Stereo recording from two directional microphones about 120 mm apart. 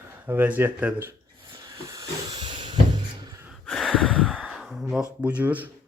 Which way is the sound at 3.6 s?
5° left (ahead or behind).